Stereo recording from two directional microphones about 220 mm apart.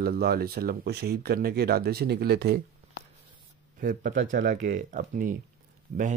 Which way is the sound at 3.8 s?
40° right (ahead or behind).